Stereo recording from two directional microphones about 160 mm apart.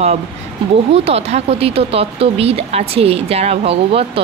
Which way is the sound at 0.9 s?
40° right (ahead or behind).